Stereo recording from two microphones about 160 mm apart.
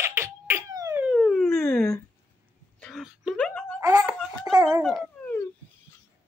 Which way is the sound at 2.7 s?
Centre (ahead or behind).